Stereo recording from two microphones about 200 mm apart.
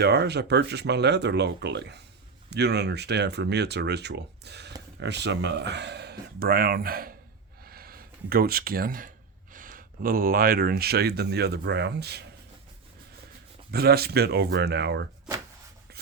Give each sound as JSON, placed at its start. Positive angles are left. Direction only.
{"t": 0.0, "sound": "speech", "side_deg": -55}
{"t": 13.7, "sound": "speech", "side_deg": -50}